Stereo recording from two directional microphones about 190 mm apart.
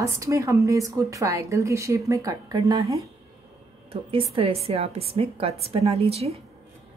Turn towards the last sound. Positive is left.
turn(degrees=-30)  # may be behind; listen again after turning